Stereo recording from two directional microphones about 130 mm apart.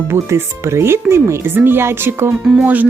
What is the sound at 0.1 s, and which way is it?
Speech, 20° right (ahead or behind).